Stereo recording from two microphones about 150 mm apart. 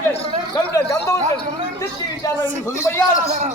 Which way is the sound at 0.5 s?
20° left (ahead or behind).